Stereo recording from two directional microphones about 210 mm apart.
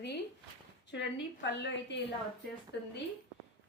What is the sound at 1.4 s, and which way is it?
Speech, 60° left (ahead or behind).